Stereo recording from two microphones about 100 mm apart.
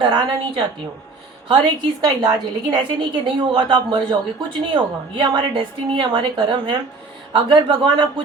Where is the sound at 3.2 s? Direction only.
55° right (ahead or behind).